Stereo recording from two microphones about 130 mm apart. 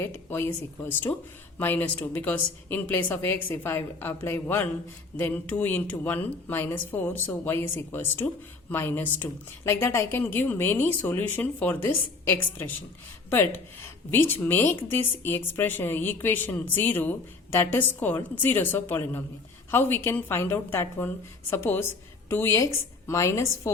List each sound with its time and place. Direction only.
0.0 s a woman's voice: 15° left (ahead or behind)